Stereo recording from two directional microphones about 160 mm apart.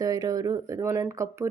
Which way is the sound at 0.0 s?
25° right (ahead or behind).